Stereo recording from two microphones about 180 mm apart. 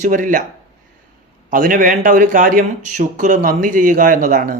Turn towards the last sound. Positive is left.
turn(degrees=-50)  # may be behind; listen again after turning